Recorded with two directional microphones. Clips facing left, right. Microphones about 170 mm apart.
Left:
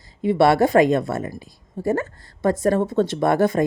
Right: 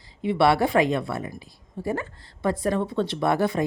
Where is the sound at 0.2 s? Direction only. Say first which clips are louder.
Left 4 dB; 45° left (ahead or behind).